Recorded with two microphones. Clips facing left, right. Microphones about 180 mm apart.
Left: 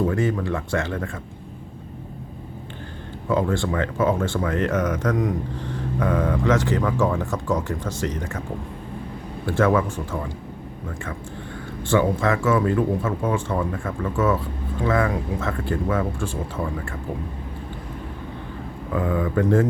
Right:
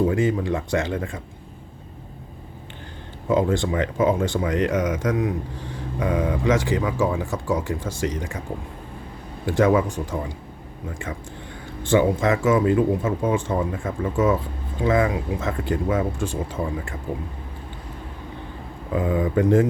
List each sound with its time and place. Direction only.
0.1 s speech: 15° right (ahead or behind)
3.2 s speech: 20° right (ahead or behind)
9.5 s speech: 15° right (ahead or behind)
11.8 s speech: 20° right (ahead or behind)
18.9 s speech: 20° right (ahead or behind)